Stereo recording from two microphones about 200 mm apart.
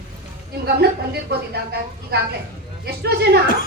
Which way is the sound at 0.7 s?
55° right (ahead or behind).